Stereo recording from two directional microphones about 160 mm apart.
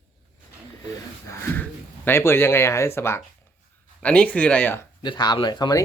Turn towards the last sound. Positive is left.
turn(degrees=25)  # may be behind; listen again after turning